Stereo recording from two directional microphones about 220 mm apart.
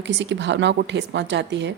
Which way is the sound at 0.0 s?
55° right (ahead or behind).